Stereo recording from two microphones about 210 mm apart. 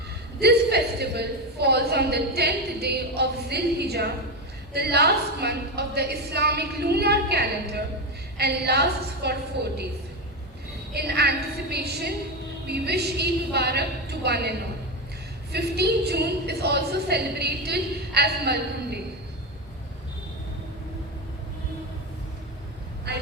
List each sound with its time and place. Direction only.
0.3 s a woman's voice: 50° right (ahead or behind)
10.9 s a woman's voice: 50° right (ahead or behind)
15.5 s a woman's voice: 50° right (ahead or behind)
23.1 s vehicle: 50° right (ahead or behind)